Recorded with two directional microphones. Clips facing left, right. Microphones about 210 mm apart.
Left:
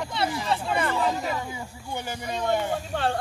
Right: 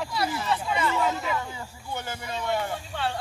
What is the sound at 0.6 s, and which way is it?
Speech, 55° left (ahead or behind).